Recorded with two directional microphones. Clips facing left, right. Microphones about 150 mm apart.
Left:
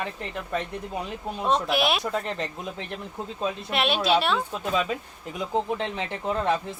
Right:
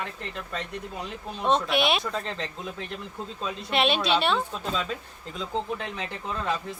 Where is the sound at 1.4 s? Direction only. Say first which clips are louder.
Even; centre (ahead or behind).